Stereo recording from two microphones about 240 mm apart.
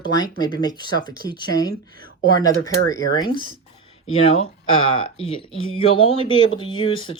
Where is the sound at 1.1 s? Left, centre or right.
Right.